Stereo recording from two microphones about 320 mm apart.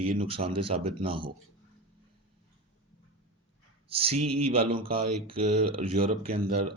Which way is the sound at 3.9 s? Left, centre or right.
Centre.